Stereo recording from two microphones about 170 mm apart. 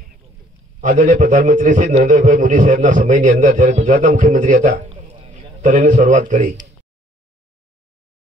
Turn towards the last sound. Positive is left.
turn(degrees=-45)  # may be behind; listen again after turning